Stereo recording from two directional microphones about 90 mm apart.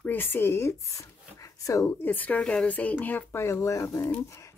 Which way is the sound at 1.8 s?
20° left (ahead or behind).